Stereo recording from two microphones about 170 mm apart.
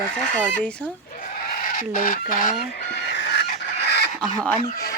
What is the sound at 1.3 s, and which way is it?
Speech, 55° left (ahead or behind).